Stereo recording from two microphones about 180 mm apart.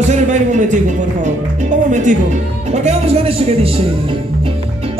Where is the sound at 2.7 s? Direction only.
35° right (ahead or behind).